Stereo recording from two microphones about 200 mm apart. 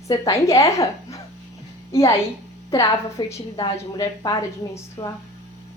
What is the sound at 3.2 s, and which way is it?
A woman's voice, 20° left (ahead or behind).